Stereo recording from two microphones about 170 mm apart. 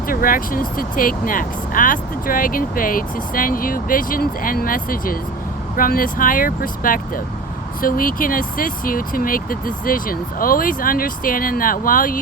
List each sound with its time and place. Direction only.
0.1 s speech: 55° left (ahead or behind)